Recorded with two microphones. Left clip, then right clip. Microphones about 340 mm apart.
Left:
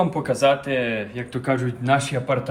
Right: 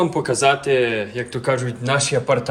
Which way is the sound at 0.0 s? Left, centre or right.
Centre.